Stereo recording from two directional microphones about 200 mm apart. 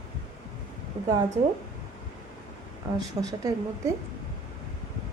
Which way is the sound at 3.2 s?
15° right (ahead or behind).